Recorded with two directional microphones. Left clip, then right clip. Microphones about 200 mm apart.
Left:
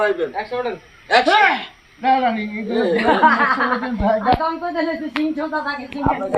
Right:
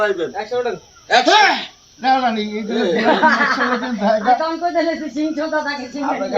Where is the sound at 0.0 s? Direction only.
40° right (ahead or behind).